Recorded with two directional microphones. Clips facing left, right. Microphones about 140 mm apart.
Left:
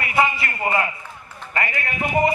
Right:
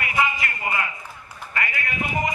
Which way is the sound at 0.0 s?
35° left (ahead or behind).